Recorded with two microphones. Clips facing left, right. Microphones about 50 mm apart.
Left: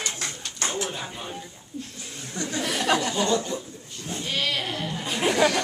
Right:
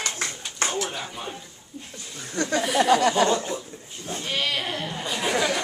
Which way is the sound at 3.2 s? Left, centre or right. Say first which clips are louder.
Right 2 dB; right.